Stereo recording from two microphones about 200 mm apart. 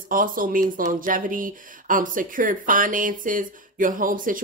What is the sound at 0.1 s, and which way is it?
Speech, 45° right (ahead or behind).